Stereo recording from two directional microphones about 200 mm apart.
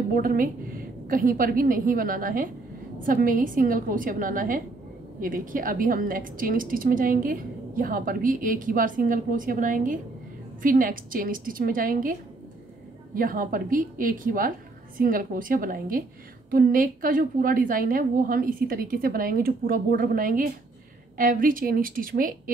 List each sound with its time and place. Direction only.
0.1 s a woman's voice: 45° right (ahead or behind)